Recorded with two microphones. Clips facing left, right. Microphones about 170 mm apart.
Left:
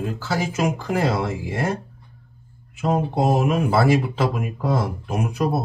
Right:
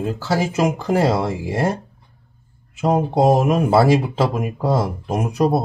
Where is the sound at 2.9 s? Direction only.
45° right (ahead or behind).